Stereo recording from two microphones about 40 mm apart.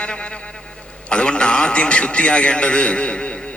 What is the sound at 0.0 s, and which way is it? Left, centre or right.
A man's voice, left.